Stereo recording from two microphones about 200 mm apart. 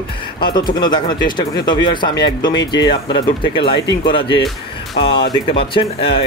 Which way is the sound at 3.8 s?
60° left (ahead or behind).